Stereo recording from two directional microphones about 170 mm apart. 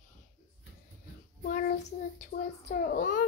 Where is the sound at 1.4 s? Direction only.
65° left (ahead or behind).